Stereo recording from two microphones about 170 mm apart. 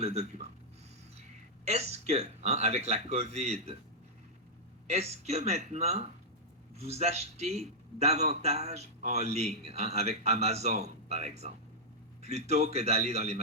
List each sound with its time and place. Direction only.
0.0 s a man's voice: 40° right (ahead or behind)
1.6 s a man's voice: 40° right (ahead or behind)
4.9 s a man's voice: 40° right (ahead or behind)